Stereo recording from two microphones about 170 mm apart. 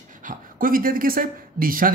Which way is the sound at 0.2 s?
55° right (ahead or behind).